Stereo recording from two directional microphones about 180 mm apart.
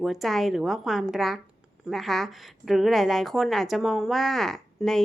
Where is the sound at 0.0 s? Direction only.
Centre (ahead or behind).